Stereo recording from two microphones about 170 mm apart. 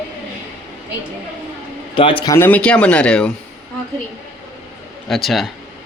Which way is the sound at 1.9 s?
30° left (ahead or behind).